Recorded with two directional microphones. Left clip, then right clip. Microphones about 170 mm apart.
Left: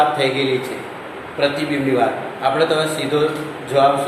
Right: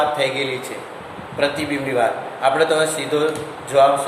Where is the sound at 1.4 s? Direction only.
45° right (ahead or behind).